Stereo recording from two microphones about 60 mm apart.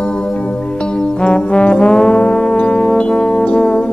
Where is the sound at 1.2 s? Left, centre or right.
Centre.